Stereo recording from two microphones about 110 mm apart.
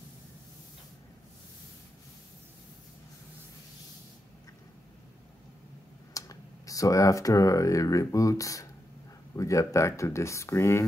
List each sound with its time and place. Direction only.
6.1 s speech: 30° left (ahead or behind)